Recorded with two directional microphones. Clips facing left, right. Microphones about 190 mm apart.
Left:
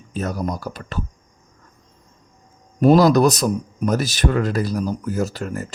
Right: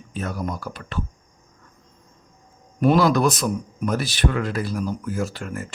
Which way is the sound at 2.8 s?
40° left (ahead or behind).